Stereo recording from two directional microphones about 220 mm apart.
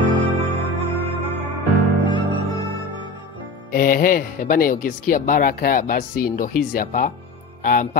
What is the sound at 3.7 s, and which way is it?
Speech, 40° left (ahead or behind).